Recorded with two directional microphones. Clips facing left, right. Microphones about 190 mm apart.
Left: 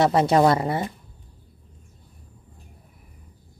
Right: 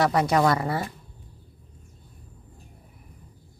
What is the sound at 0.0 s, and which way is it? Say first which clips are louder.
Speech: left 4 dB; 25° left (ahead or behind).